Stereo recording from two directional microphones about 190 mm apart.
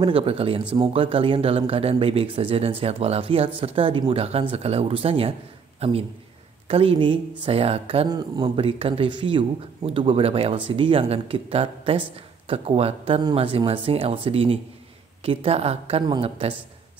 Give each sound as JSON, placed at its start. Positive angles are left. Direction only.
{"t": 0.0, "sound": "a man's voice", "side_deg": -30}